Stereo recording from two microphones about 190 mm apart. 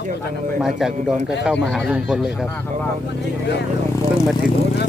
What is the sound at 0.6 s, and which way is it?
Speech, centre (ahead or behind).